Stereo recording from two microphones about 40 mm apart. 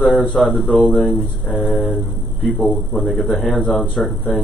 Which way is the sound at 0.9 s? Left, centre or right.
Centre.